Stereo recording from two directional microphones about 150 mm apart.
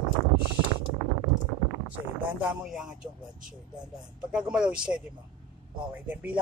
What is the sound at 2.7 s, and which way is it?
Speech, 5° right (ahead or behind).